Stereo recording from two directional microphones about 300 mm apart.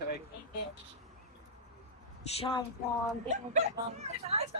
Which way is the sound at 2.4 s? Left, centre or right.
Centre.